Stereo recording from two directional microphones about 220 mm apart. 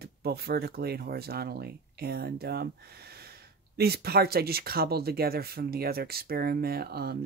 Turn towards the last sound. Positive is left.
turn(degrees=-45)  # may be behind; listen again after turning